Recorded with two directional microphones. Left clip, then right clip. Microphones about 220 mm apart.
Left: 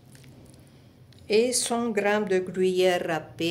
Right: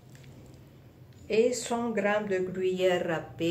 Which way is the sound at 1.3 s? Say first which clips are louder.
Left 3 dB; 55° left (ahead or behind).